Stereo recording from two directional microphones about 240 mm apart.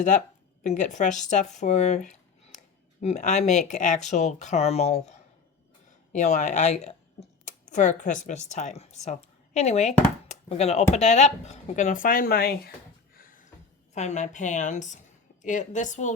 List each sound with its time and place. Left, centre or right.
0.6 s speech: left
6.1 s speech: left
13.1 s a sound: left
13.9 s a woman's voice: left